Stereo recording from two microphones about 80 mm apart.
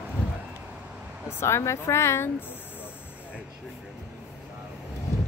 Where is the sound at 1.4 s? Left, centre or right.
Left.